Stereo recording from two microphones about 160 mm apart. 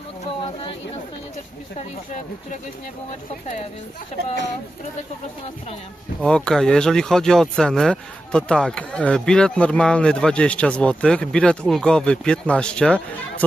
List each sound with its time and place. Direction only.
0.4 s chatter: 35° left (ahead or behind)
6.1 s speech: 5° left (ahead or behind)